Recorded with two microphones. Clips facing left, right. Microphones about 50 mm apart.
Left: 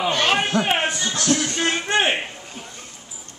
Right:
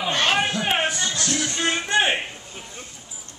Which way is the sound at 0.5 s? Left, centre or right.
Left.